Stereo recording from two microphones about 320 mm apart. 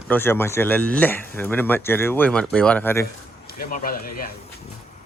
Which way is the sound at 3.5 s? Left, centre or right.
Left.